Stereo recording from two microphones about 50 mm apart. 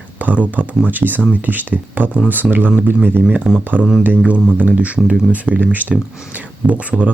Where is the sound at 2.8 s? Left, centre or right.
Right.